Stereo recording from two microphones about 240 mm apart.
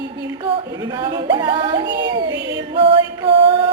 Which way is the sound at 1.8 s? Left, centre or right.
Right.